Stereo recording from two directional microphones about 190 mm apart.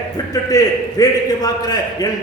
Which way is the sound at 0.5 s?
20° left (ahead or behind).